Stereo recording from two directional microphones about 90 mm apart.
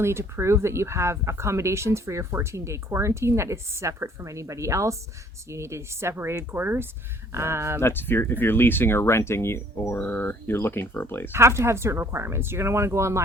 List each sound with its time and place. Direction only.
0.0 s speech: 30° right (ahead or behind)
7.8 s speech: 25° left (ahead or behind)
11.3 s speech: 30° right (ahead or behind)